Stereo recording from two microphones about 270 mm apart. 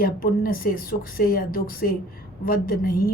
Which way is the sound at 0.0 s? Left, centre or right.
Left.